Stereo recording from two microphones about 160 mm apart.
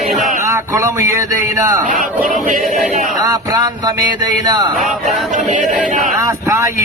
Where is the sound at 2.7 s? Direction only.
50° right (ahead or behind).